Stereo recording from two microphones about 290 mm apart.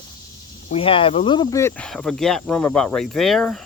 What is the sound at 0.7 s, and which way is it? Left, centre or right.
Speech, centre.